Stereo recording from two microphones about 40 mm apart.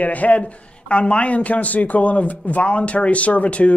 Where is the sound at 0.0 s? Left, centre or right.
Left.